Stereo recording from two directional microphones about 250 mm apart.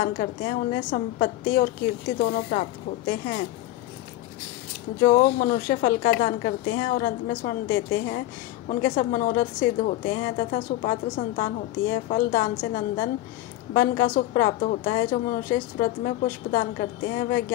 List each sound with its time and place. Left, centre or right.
0.0 s a woman's voice: left
5.0 s a woman's voice: left